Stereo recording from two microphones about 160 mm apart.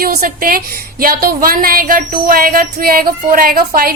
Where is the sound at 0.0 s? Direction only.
65° right (ahead or behind).